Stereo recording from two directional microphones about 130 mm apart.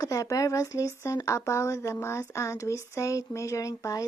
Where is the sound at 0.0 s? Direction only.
25° left (ahead or behind).